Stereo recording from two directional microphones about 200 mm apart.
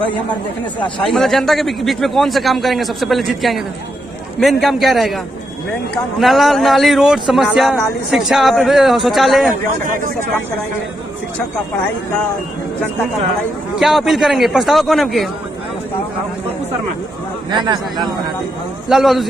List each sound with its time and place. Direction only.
1.0 s a man's voice: centre (ahead or behind)
9.8 s speech: 40° right (ahead or behind)
13.7 s a man's voice: centre (ahead or behind)
17.5 s a man's voice: 20° right (ahead or behind)
18.9 s a man's voice: centre (ahead or behind)